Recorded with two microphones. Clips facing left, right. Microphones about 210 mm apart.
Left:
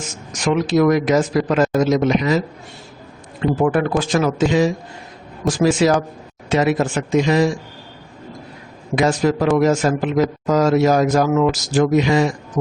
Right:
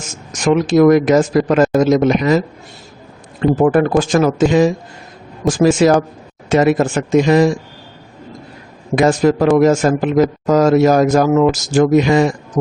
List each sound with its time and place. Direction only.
0.4 s a man's voice: 45° right (ahead or behind)
3.4 s a man's voice: 50° right (ahead or behind)
9.0 s a man's voice: 50° right (ahead or behind)